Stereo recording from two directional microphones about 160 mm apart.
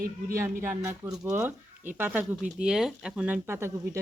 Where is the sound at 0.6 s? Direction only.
15° right (ahead or behind).